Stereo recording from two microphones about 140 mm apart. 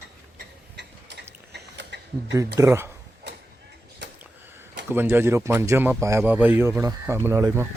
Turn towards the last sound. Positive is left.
turn(degrees=-20)  # may be behind; listen again after turning